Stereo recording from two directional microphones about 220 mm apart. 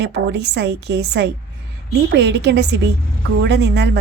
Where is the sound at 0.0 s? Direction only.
50° right (ahead or behind).